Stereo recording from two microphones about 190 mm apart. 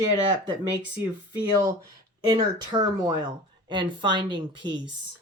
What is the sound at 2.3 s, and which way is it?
Speech, 20° right (ahead or behind).